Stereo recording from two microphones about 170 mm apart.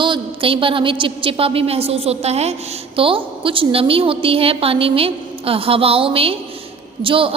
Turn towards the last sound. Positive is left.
turn(degrees=-30)  # may be behind; listen again after turning